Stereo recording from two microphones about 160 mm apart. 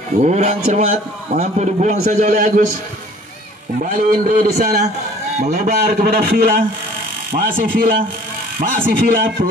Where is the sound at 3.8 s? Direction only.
60° right (ahead or behind).